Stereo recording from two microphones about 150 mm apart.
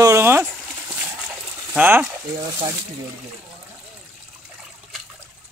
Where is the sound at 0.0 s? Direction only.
20° right (ahead or behind).